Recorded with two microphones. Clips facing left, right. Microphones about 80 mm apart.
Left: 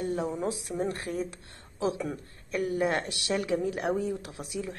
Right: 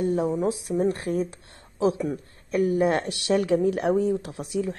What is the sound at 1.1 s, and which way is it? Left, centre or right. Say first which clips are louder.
Speech: right 7 dB; right.